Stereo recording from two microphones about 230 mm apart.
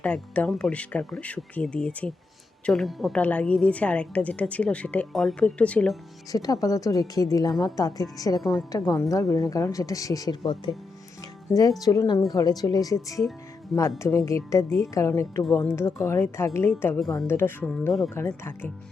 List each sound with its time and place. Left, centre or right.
0.0 s a woman's voice: centre
6.3 s speech: centre
11.8 s speech: centre